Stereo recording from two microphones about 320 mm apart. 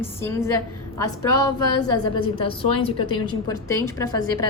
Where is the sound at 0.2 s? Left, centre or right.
Centre.